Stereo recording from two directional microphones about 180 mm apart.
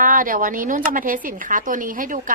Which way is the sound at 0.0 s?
50° right (ahead or behind).